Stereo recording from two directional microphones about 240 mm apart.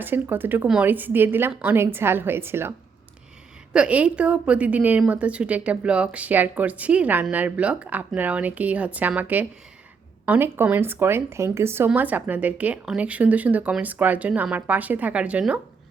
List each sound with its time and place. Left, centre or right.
0.0 s a woman's voice: centre